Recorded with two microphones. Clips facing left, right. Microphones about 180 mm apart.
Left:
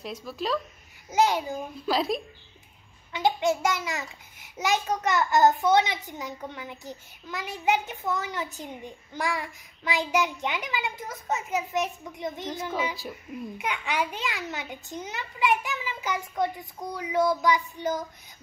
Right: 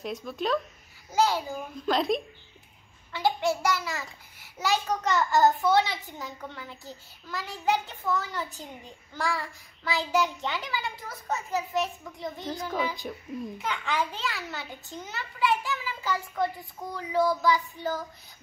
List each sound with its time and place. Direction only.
0.0 s speech: centre (ahead or behind)
1.1 s a child's voice: 20° left (ahead or behind)
1.9 s speech: centre (ahead or behind)
3.1 s a child's voice: 20° left (ahead or behind)
13.0 s speech: 5° left (ahead or behind)
13.6 s a child's voice: 15° left (ahead or behind)